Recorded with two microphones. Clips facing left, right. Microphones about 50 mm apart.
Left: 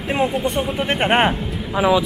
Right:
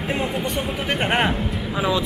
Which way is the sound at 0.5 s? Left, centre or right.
Centre.